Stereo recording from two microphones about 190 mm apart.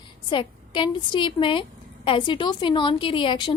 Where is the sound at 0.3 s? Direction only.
25° left (ahead or behind).